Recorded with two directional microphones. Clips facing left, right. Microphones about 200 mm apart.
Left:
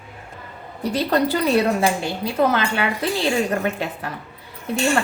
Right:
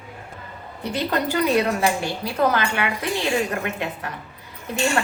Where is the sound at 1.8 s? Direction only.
30° left (ahead or behind).